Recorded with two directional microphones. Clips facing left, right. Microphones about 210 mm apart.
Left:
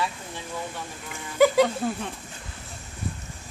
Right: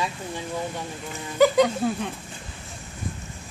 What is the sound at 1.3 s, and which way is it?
Speech, 5° left (ahead or behind).